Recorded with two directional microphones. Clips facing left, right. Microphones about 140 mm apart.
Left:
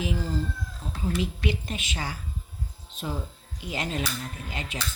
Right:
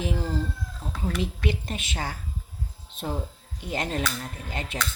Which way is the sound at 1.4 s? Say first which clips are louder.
Right 1 dB; 50° right (ahead or behind).